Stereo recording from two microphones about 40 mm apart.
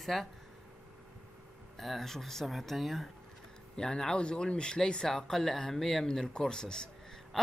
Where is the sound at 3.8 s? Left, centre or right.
Centre.